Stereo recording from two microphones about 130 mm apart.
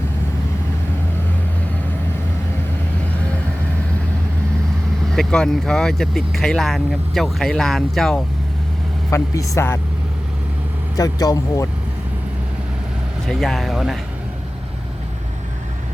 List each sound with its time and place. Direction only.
5.1 s speech: 5° left (ahead or behind)
9.0 s speech: 25° left (ahead or behind)
10.9 s speech: 30° left (ahead or behind)
13.2 s speech: centre (ahead or behind)